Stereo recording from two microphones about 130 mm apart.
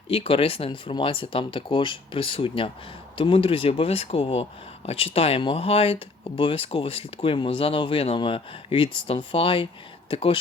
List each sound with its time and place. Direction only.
0.1 s speech: 45° left (ahead or behind)